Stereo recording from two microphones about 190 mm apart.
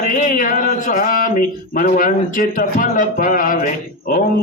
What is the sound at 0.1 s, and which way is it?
Speech, 45° left (ahead or behind).